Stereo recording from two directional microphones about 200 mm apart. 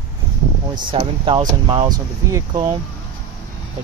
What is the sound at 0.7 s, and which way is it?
Speech, 25° right (ahead or behind).